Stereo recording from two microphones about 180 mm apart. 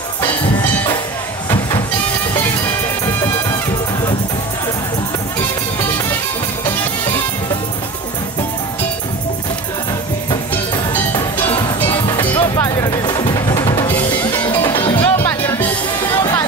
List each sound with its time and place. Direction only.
11.1 s music: 25° left (ahead or behind)
12.3 s music: 15° left (ahead or behind)
13.8 s music: 10° left (ahead or behind)